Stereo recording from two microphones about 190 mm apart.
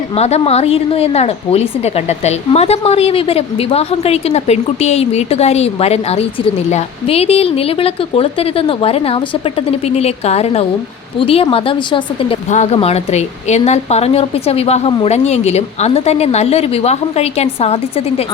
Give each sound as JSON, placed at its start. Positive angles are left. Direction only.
{"t": 0.2, "sound": "a woman's voice", "side_deg": 35}